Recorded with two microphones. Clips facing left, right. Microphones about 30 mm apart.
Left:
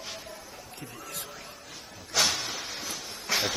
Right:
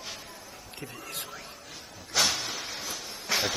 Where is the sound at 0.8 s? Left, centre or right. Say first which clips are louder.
Right 2 dB; right.